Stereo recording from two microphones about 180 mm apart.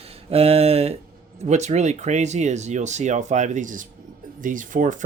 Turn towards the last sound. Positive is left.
turn(degrees=-45)  # may be behind; listen again after turning